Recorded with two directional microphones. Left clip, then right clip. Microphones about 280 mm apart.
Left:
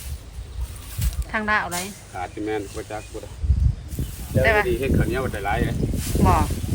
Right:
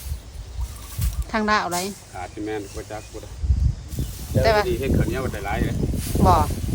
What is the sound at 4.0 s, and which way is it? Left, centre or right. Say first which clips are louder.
Snake: right 1 dB; centre.